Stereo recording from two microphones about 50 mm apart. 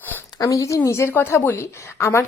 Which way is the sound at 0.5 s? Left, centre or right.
Left.